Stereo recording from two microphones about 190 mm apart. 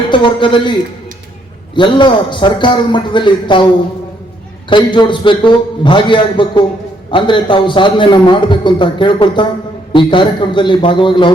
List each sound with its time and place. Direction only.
0.1 s a man's voice: 25° left (ahead or behind)
4.7 s a man's voice: 25° left (ahead or behind)